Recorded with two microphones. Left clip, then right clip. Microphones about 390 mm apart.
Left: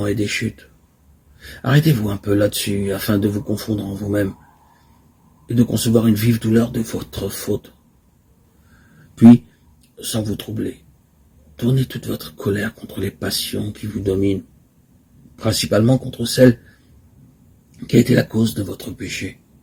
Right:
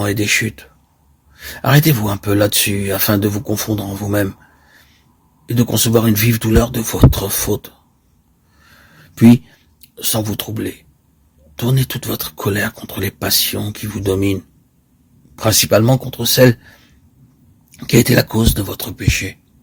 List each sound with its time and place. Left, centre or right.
0.0 s speech: right
5.5 s speech: right
9.1 s speech: right
15.4 s speech: right
18.1 s speech: right